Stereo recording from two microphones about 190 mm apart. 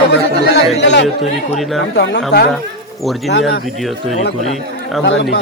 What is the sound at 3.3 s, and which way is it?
Speech, 60° left (ahead or behind).